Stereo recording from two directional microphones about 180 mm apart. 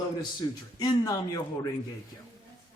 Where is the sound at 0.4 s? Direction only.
25° left (ahead or behind).